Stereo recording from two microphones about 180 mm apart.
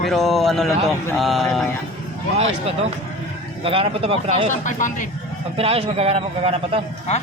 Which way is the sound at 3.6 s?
30° right (ahead or behind).